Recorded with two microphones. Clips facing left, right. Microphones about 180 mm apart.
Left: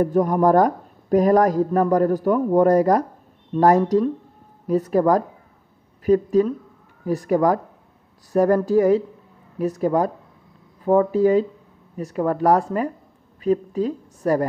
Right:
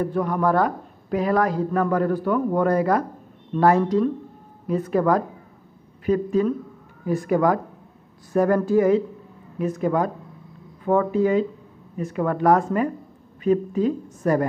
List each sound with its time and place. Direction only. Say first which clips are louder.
0.0 s a woman's voice: left 5 dB; 45° left (ahead or behind)